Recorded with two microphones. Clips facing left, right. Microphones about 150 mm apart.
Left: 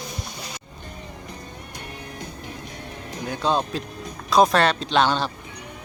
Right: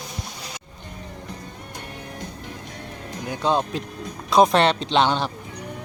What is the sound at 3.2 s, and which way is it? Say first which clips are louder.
Speech: right 1 dB; 20° right (ahead or behind).